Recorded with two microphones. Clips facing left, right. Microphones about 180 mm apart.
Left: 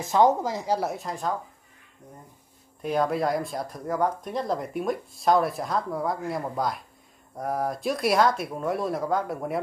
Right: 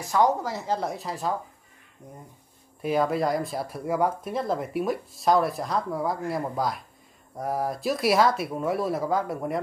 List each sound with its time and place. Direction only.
0.0 s a woman's voice: 20° left (ahead or behind); by 1.3 s 5° right (ahead or behind)
2.8 s speech: centre (ahead or behind)